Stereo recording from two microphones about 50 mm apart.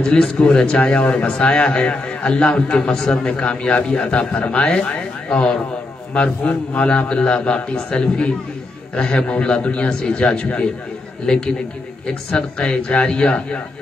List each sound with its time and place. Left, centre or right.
0.0 s a man's voice: centre
11.2 s a man's voice: centre